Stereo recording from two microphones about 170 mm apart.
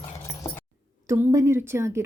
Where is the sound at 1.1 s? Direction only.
20° right (ahead or behind).